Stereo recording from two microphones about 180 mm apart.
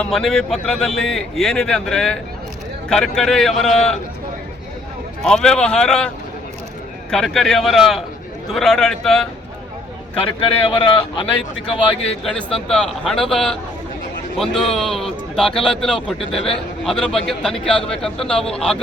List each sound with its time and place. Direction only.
0.0 s a man's voice: centre (ahead or behind)
5.2 s a man's voice: 5° left (ahead or behind)
7.1 s a man's voice: centre (ahead or behind)
10.2 s speech: 30° left (ahead or behind)
12.6 s a man's voice: 5° left (ahead or behind)